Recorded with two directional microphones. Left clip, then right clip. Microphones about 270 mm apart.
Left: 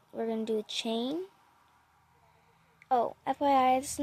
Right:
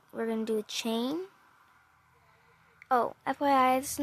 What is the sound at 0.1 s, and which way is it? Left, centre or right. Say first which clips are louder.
Speech: right 1 dB; right.